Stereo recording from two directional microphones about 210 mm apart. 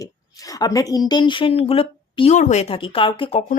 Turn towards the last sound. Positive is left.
turn(degrees=25)  # may be behind; listen again after turning